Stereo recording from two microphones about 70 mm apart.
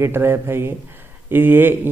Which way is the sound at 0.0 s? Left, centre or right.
Right.